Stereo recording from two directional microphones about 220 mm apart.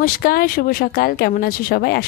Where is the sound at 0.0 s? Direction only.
40° left (ahead or behind).